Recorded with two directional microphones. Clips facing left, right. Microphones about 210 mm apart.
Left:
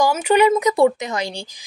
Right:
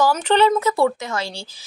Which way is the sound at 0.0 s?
10° left (ahead or behind).